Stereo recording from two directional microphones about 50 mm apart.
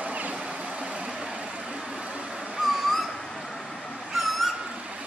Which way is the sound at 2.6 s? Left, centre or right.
Centre.